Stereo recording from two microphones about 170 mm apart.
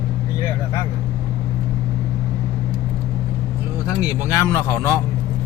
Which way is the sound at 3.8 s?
20° left (ahead or behind).